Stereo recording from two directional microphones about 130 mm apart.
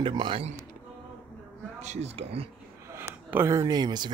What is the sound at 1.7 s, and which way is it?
Speech, 60° right (ahead or behind).